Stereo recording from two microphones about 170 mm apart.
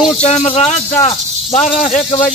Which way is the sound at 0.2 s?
40° left (ahead or behind).